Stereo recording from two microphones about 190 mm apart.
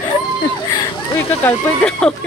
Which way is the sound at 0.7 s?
15° left (ahead or behind).